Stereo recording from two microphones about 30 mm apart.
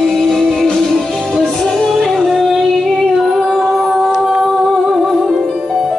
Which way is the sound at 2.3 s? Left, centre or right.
Centre.